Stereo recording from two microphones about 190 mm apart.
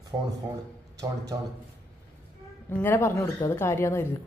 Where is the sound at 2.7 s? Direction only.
10° left (ahead or behind).